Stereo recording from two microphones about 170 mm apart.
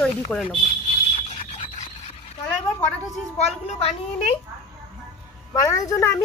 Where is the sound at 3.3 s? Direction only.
40° left (ahead or behind).